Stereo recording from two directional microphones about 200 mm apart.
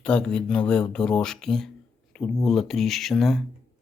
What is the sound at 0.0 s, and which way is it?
Speech, 5° left (ahead or behind).